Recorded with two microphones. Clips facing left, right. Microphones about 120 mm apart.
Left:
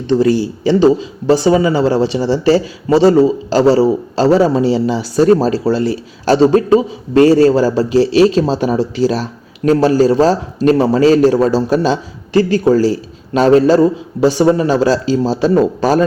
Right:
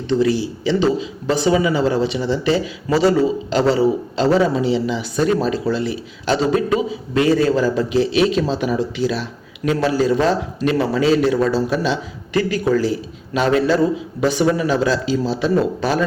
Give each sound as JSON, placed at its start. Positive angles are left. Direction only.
{"t": 0.1, "sound": "speech", "side_deg": 45}